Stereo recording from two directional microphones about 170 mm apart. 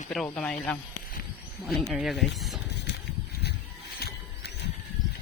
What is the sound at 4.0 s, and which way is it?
Music, 70° left (ahead or behind).